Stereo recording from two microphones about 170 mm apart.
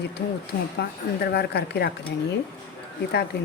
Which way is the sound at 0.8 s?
75° left (ahead or behind).